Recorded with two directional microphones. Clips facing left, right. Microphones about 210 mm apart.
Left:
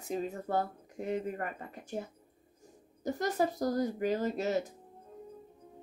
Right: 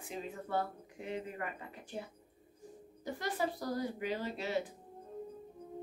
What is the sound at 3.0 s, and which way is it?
Speech, 40° left (ahead or behind).